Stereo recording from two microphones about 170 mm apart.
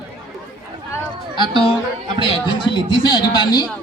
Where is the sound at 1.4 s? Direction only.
30° left (ahead or behind).